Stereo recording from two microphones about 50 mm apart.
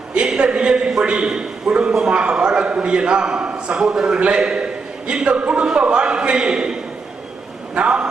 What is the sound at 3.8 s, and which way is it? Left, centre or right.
A man's voice, centre.